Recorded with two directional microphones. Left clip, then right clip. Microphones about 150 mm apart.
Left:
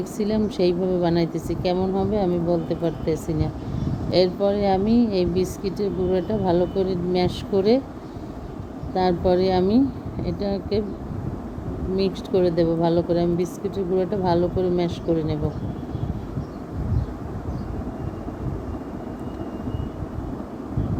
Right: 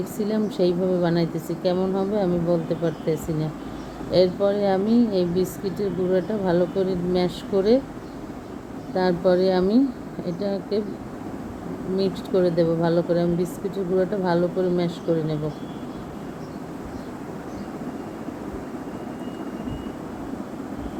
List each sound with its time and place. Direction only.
0.0 s speech: 15° left (ahead or behind)
9.0 s speech: 20° left (ahead or behind)
11.9 s speech: 15° left (ahead or behind)